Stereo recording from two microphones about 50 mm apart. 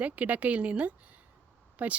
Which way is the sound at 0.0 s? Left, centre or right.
Right.